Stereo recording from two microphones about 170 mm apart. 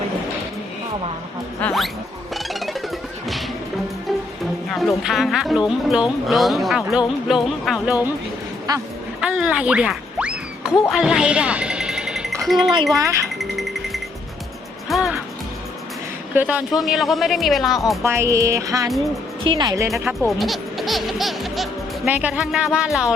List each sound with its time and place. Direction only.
1.6 s speech: centre (ahead or behind)
2.3 s music: centre (ahead or behind)
4.7 s speech: centre (ahead or behind)
8.7 s speech: 20° right (ahead or behind)
9.2 s a sound: 5° right (ahead or behind)
10.9 s music: 5° right (ahead or behind)
13.0 s speech: 20° right (ahead or behind)
13.4 s music: centre (ahead or behind)
16.3 s speech: 10° right (ahead or behind)
18.0 s music: 15° right (ahead or behind)
19.5 s speech: 25° right (ahead or behind)
19.9 s music: centre (ahead or behind)